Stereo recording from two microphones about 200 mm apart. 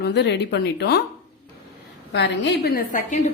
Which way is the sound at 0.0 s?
55° left (ahead or behind).